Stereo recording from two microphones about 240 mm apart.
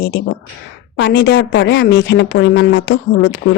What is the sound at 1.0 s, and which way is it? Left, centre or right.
A woman's voice, left.